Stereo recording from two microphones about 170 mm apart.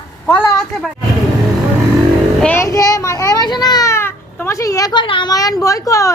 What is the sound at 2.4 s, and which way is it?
A child's voice, 15° left (ahead or behind).